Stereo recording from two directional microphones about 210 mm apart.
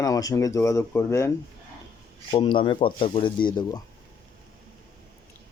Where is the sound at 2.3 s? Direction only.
25° left (ahead or behind).